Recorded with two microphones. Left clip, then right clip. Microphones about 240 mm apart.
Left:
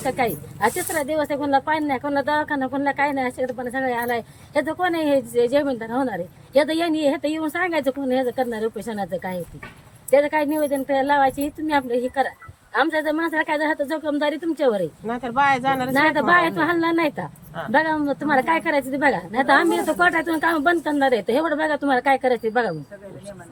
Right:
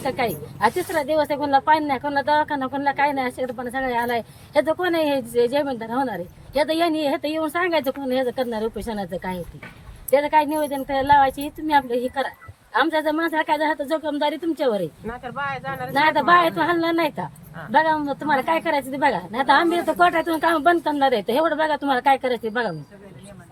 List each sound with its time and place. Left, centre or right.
0.0 s a woman's voice: centre
15.0 s speech: left
15.9 s a woman's voice: centre